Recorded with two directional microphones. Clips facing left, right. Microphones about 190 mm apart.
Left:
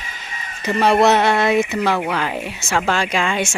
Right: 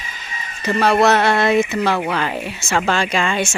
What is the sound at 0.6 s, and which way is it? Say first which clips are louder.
Speech: even; 15° left (ahead or behind).